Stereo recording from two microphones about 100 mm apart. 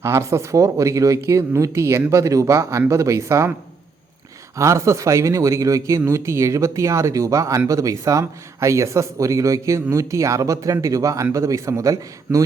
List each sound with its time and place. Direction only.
0.0 s speech: 30° right (ahead or behind)
4.5 s speech: 30° right (ahead or behind)